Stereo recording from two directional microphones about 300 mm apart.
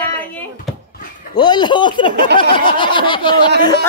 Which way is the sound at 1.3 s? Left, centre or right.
Centre.